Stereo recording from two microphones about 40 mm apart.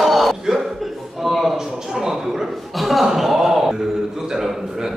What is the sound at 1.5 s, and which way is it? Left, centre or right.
Chuckle, centre.